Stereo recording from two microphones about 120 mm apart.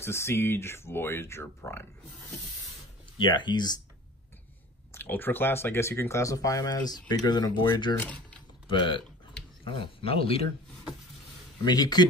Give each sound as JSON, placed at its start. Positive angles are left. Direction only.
{"t": 0.0, "sound": "speech", "side_deg": 20}
{"t": 3.2, "sound": "speech", "side_deg": 40}
{"t": 4.9, "sound": "speech", "side_deg": 15}
{"t": 8.0, "sound": "speech", "side_deg": 10}
{"t": 8.6, "sound": "speech", "side_deg": 45}
{"t": 11.6, "sound": "speech", "side_deg": 35}